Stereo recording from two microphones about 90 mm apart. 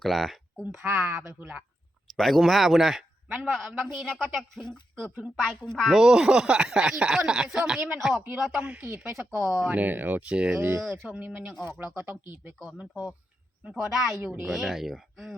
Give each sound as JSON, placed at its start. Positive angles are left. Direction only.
{"t": 0.0, "sound": "speech", "side_deg": 0}
{"t": 0.8, "sound": "speech", "side_deg": -25}
{"t": 2.1, "sound": "speech", "side_deg": 0}
{"t": 8.7, "sound": "speech", "side_deg": -15}
{"t": 9.4, "sound": "speech", "side_deg": -5}
{"t": 9.6, "sound": "speech", "side_deg": -20}
{"t": 10.6, "sound": "speech", "side_deg": -30}
{"t": 12.9, "sound": "speech", "side_deg": 0}